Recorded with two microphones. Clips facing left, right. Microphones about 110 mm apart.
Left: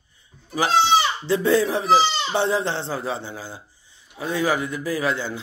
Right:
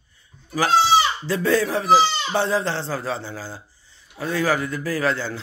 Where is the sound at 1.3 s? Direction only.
20° left (ahead or behind).